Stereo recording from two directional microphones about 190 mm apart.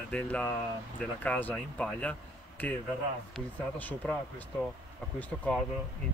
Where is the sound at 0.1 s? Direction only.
10° left (ahead or behind).